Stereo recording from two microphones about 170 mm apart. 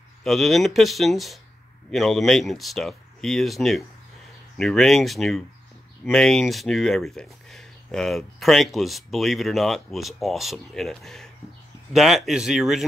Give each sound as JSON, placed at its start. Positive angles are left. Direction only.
{"t": 0.2, "sound": "speech", "side_deg": 0}